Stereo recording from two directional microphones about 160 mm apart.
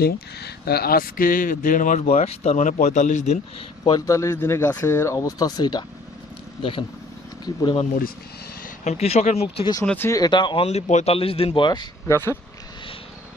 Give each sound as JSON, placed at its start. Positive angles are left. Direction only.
{"t": 0.0, "sound": "speech", "side_deg": 80}
{"t": 3.8, "sound": "speech", "side_deg": 25}
{"t": 7.4, "sound": "speech", "side_deg": 25}
{"t": 8.8, "sound": "speech", "side_deg": 40}
{"t": 9.8, "sound": "speech", "side_deg": 15}
{"t": 12.1, "sound": "speech", "side_deg": 15}